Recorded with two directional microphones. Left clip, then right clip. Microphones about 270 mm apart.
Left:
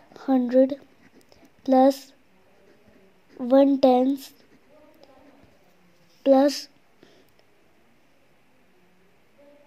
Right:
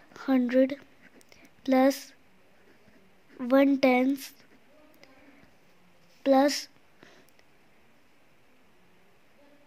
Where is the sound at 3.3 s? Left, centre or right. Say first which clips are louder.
Left 5 dB; centre.